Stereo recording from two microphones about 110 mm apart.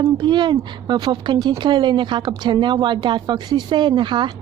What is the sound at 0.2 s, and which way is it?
A woman's voice, 45° right (ahead or behind).